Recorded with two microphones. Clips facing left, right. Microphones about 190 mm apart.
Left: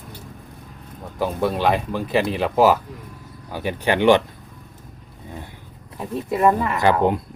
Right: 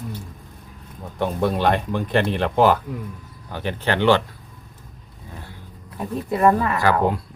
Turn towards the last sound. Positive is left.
turn(degrees=20)  # may be behind; listen again after turning